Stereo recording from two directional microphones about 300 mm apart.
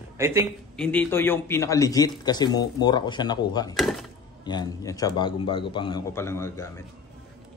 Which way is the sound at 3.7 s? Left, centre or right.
Centre.